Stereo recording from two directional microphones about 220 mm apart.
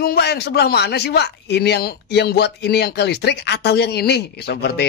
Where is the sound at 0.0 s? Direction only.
45° left (ahead or behind).